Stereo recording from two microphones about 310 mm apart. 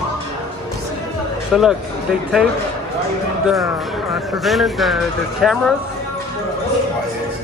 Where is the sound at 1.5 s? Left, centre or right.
Centre.